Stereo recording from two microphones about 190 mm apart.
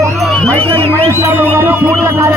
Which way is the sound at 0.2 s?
5° left (ahead or behind).